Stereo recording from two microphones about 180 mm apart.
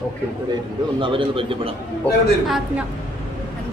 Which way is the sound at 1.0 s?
30° right (ahead or behind).